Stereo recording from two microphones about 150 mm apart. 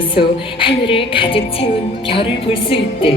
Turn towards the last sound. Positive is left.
turn(degrees=35)  # may be behind; listen again after turning